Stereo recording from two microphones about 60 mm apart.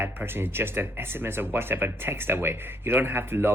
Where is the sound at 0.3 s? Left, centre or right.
Right.